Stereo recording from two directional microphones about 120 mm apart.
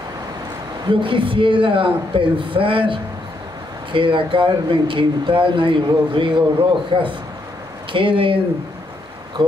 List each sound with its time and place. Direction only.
0.8 s speech: 45° right (ahead or behind)
9.4 s speech: 40° right (ahead or behind)